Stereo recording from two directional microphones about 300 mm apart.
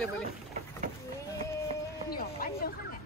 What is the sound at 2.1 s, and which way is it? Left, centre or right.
Music, left.